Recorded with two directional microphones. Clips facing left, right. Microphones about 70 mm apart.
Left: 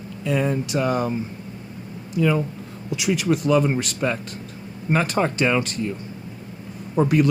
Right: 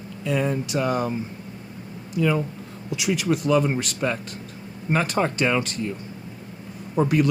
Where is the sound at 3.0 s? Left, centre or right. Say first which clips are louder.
Left 2 dB; left.